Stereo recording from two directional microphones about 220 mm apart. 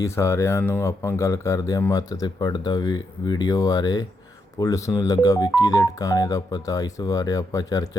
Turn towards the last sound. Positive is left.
turn(degrees=15)  # may be behind; listen again after turning